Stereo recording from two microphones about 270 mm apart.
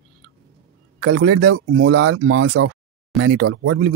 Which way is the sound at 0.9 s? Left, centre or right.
Right.